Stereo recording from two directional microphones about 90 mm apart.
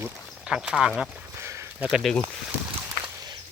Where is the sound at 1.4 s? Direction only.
30° right (ahead or behind).